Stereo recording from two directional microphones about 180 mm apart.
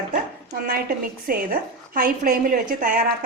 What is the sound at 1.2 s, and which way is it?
A woman's voice, 55° right (ahead or behind).